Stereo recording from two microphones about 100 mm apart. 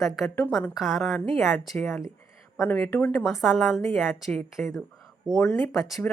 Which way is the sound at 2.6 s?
15° left (ahead or behind).